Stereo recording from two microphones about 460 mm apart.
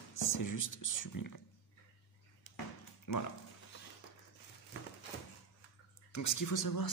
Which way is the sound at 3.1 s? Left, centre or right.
Left.